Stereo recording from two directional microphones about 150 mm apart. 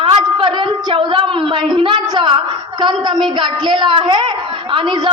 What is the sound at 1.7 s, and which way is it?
A woman's voice, 35° right (ahead or behind).